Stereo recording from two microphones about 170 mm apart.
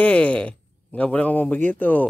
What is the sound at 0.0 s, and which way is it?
Speech, 10° left (ahead or behind).